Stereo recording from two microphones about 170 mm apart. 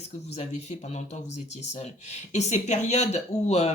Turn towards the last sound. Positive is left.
turn(degrees=40)  # may be behind; listen again after turning